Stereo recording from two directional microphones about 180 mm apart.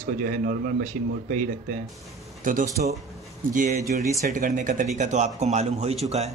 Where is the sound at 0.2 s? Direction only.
50° right (ahead or behind).